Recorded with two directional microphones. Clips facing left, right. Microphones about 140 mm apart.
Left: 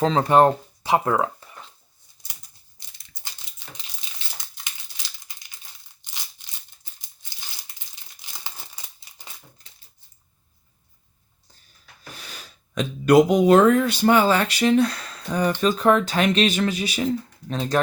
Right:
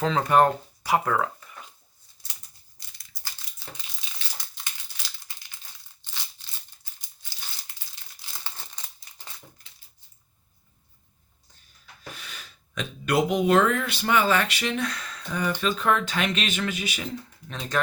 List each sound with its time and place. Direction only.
0.0 s speech: 30° left (ahead or behind)
3.1 s crumpling: 25° left (ahead or behind)
6.0 s a sound: 15° left (ahead or behind)
8.1 s crumpling: 15° left (ahead or behind)
12.1 s speech: 35° left (ahead or behind)